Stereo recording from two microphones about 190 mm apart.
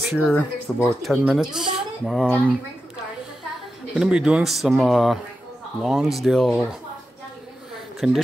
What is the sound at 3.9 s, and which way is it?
Speech, 5° right (ahead or behind).